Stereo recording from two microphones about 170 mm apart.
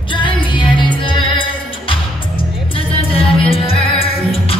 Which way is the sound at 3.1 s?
35° left (ahead or behind).